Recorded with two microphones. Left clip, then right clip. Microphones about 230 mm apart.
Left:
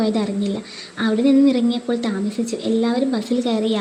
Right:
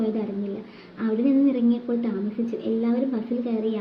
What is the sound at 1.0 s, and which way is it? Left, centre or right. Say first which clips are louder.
A woman's voice: left 6 dB; left.